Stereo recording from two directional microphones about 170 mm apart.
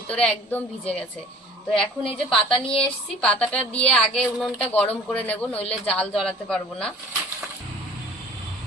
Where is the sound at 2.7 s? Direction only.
5° left (ahead or behind).